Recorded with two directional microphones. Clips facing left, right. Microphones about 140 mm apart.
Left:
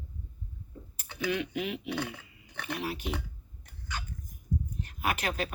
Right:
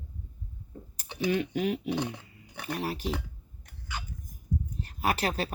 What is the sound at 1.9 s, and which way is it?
Speech, 20° right (ahead or behind).